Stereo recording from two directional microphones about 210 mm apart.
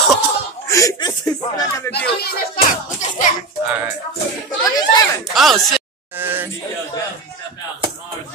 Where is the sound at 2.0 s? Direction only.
50° left (ahead or behind).